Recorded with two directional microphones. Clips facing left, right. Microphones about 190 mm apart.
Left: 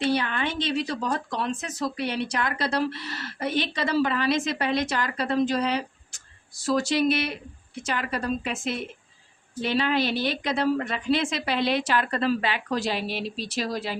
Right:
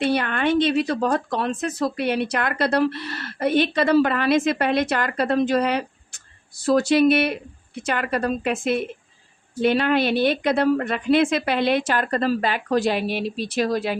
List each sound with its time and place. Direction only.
0.0 s a woman's voice: 55° right (ahead or behind)